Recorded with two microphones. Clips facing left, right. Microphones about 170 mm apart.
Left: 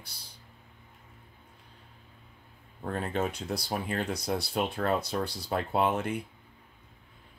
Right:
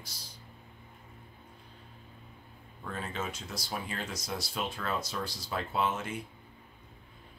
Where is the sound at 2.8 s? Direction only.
55° left (ahead or behind).